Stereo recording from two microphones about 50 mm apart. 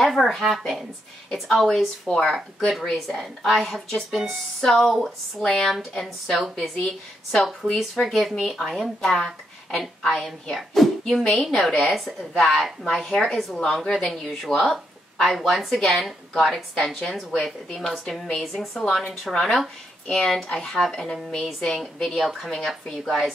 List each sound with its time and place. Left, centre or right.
0.0 s a woman's voice: centre
16.7 s speech: centre
17.1 s a woman's voice: centre